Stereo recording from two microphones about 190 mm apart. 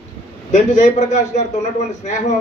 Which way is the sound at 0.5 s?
40° left (ahead or behind).